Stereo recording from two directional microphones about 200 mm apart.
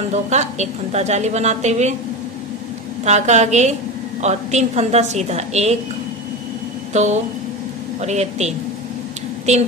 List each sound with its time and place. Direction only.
0.1 s a woman's voice: 35° right (ahead or behind)
3.1 s a woman's voice: 35° right (ahead or behind)
6.9 s a woman's voice: 35° right (ahead or behind)